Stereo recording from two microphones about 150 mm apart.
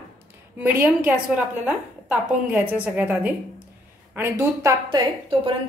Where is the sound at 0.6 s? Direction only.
10° right (ahead or behind).